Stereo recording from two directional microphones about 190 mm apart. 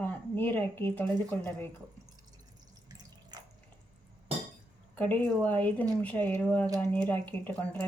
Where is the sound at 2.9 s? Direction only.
20° right (ahead or behind).